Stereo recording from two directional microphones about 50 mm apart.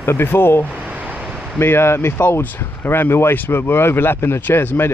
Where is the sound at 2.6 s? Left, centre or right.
Left.